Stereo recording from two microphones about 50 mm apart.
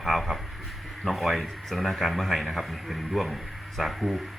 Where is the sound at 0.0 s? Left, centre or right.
Centre.